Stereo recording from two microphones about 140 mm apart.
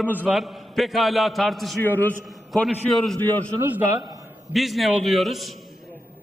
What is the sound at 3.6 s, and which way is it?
Speech, 15° right (ahead or behind).